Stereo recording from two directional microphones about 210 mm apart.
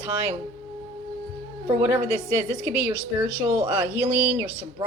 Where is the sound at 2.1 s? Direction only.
15° left (ahead or behind).